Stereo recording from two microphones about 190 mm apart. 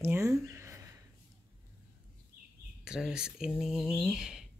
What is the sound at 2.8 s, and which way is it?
Speech, 5° right (ahead or behind).